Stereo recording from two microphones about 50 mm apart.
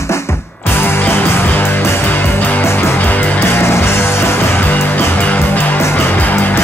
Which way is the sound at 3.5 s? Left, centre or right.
Left.